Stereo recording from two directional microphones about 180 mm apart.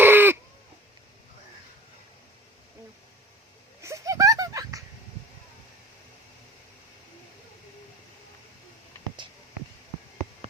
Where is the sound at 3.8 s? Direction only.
15° right (ahead or behind).